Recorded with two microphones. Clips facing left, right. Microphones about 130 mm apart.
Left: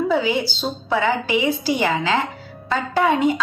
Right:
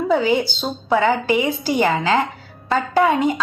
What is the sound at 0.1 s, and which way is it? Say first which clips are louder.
A woman's voice: right 3 dB; 50° right (ahead or behind).